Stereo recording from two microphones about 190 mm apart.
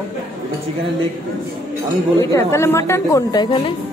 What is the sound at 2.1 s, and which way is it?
A woman's voice, 15° left (ahead or behind).